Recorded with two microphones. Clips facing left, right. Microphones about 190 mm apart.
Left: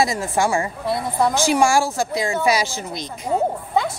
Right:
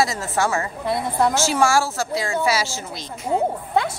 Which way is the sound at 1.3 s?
15° left (ahead or behind).